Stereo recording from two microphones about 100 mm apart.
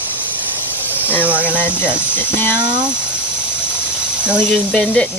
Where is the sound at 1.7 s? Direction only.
10° right (ahead or behind).